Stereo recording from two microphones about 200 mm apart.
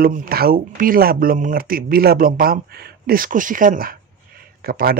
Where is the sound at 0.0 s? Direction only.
45° right (ahead or behind).